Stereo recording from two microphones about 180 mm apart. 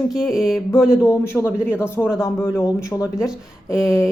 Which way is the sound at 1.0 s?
15° left (ahead or behind).